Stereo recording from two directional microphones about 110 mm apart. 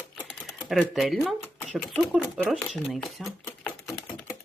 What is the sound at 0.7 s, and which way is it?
Speech, 5° right (ahead or behind).